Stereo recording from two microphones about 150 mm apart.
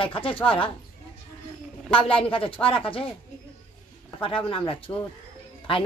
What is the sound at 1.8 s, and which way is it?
Speech, 35° left (ahead or behind).